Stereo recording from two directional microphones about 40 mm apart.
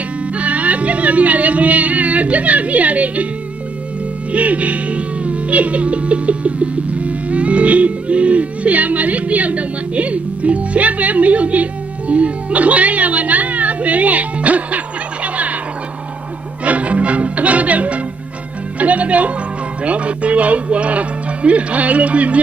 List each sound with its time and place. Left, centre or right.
0.3 s speech: right
4.3 s speech: right
15.2 s a sound: right
16.6 s music: right
18.8 s speech: right